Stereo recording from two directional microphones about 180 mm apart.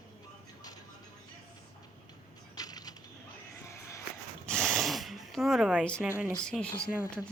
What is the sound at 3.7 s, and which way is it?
Music, 15° left (ahead or behind).